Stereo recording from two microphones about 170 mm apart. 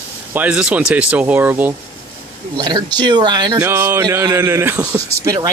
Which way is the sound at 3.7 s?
15° right (ahead or behind).